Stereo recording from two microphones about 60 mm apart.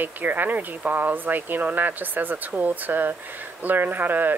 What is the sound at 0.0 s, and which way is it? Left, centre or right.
Speech, right.